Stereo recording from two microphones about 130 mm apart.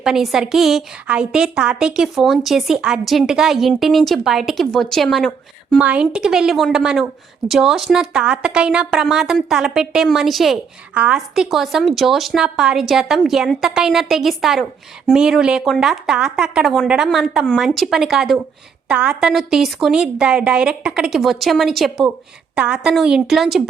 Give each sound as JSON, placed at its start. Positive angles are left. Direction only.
{"t": 0.0, "sound": "a woman's voice", "side_deg": -5}
{"t": 5.8, "sound": "a woman's voice", "side_deg": -10}